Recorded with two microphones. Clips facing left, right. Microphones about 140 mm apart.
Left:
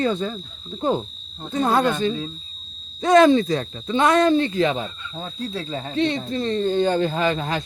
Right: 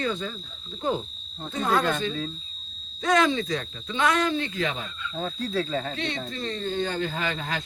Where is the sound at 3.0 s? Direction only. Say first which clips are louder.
Left 8 dB; 30° left (ahead or behind).